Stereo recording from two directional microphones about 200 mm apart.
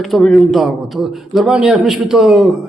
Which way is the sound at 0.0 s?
Centre (ahead or behind).